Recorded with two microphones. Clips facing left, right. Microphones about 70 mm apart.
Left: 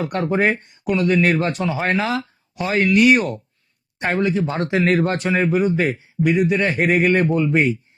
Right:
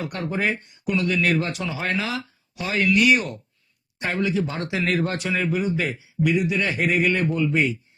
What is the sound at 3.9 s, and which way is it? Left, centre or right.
A woman's voice, left.